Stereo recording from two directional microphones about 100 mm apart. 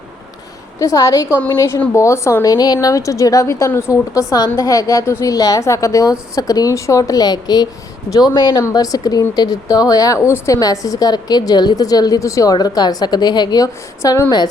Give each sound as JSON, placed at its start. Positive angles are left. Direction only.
{"t": 0.8, "sound": "a woman's voice", "side_deg": 30}